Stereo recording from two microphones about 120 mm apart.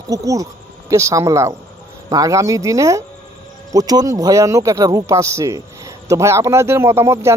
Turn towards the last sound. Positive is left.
turn(degrees=-20)  # may be behind; listen again after turning